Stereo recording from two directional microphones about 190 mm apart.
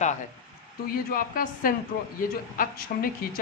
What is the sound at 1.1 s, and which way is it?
A woman's voice, 50° left (ahead or behind).